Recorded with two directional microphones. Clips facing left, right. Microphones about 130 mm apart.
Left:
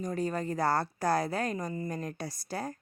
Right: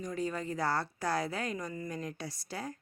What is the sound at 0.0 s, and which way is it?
A woman's voice, 45° left (ahead or behind).